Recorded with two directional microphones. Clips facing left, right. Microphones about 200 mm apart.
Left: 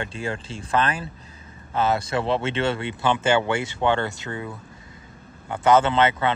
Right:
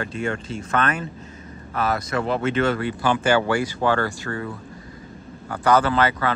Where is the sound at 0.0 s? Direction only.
30° left (ahead or behind).